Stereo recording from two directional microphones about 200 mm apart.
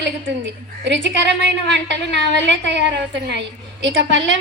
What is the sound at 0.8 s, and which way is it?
A woman's voice, 65° right (ahead or behind).